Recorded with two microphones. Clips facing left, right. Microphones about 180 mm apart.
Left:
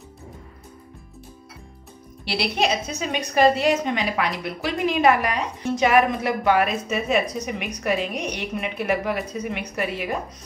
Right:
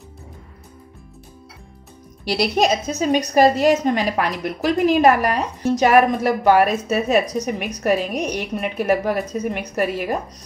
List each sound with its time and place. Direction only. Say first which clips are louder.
2.2 s a woman's voice: right 5 dB; 45° right (ahead or behind)